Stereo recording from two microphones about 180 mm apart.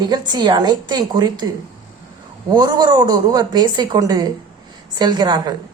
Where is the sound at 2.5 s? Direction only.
20° right (ahead or behind).